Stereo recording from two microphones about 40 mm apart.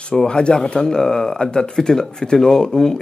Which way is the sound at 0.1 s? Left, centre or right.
Centre.